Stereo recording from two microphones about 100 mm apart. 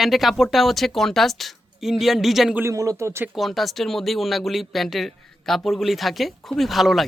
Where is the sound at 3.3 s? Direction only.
Centre (ahead or behind).